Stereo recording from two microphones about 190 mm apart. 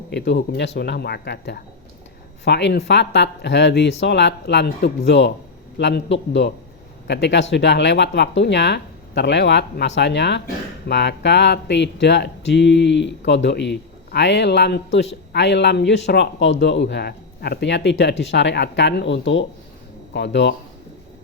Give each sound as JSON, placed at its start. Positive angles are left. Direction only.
{"t": 0.1, "sound": "a man's voice", "side_deg": 65}